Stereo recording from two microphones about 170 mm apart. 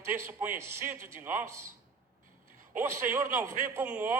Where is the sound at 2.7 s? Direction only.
15° right (ahead or behind).